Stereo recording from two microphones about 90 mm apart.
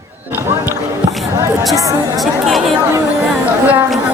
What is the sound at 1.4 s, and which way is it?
Speech, 35° right (ahead or behind).